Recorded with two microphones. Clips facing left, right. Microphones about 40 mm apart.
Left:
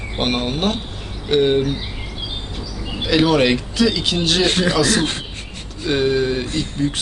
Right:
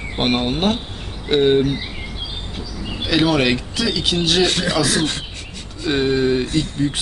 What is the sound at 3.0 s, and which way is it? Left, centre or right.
Speech, centre.